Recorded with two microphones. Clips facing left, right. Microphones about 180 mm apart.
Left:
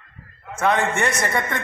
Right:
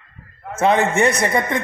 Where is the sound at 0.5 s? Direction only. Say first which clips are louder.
Right 4 dB; 25° right (ahead or behind).